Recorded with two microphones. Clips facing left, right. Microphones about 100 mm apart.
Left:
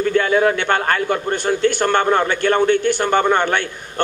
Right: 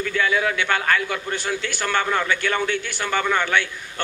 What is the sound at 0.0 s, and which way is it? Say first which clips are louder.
A man's voice: left 7 dB; 45° left (ahead or behind).